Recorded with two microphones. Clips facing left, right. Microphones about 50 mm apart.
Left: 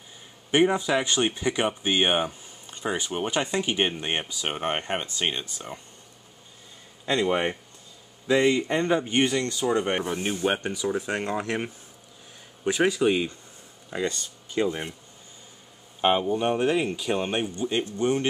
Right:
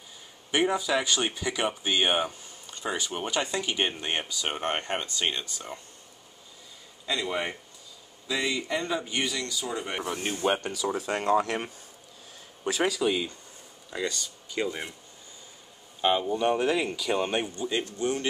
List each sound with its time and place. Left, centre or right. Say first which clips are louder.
0.5 s speech: left 4 dB; left
1.8 s a sound: left 2 dB; centre
2.9 s speech: left 3 dB; centre
7.1 s speech: left 6 dB; left
10.0 s speech: left 2 dB; centre
12.8 s speech: left 4 dB; left
16.0 s speech: left 3 dB; left
16.3 s speech: left 1 dB; centre
17.1 s speech: even; centre
17.6 s speech: left 3 dB; left